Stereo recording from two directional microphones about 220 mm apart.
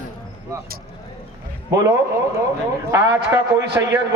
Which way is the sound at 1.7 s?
15° right (ahead or behind).